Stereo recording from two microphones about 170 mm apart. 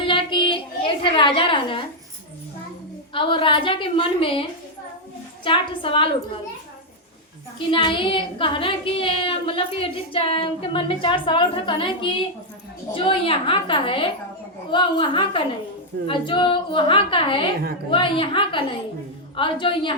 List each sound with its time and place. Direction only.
0.0 s a sound: 30° left (ahead or behind)
3.1 s a woman's voice: 30° left (ahead or behind)
5.5 s a woman's voice: 30° left (ahead or behind)
7.7 s a woman's voice: 30° left (ahead or behind)